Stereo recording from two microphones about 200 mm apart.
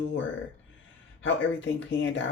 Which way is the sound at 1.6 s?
70° left (ahead or behind).